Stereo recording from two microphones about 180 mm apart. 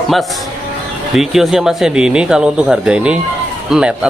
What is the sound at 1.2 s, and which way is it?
Speech, centre (ahead or behind).